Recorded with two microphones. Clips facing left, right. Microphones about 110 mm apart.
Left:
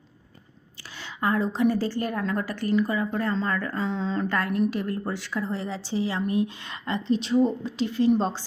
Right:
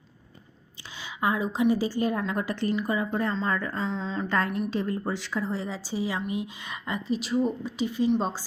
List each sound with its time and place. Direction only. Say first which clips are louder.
0.9 s speech: left 2 dB; 15° right (ahead or behind)
3.8 s a woman's voice: left 3 dB; centre (ahead or behind)
4.3 s speech: even; 20° right (ahead or behind)